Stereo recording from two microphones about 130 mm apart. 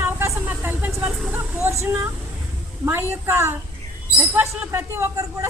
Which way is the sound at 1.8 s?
20° right (ahead or behind).